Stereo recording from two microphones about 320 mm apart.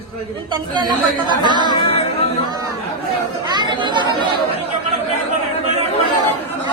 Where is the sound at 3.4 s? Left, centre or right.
Centre.